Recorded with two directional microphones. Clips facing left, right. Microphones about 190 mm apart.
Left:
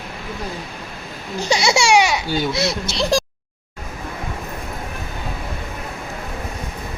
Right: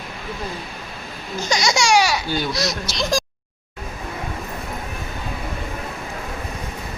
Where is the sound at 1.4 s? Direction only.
30° left (ahead or behind).